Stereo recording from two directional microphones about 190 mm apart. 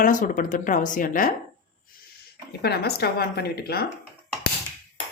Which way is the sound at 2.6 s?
55° left (ahead or behind).